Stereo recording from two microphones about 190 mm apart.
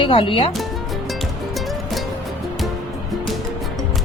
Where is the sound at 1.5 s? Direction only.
Centre (ahead or behind).